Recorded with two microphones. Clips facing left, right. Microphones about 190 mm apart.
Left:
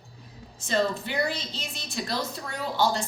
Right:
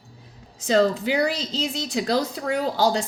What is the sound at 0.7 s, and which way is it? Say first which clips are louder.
A woman's voice: right 7 dB; 90° right.